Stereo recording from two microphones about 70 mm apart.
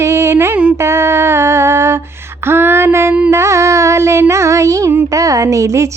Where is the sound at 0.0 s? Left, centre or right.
Right.